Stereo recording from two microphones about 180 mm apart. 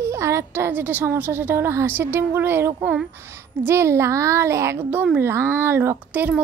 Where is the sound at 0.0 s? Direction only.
15° right (ahead or behind).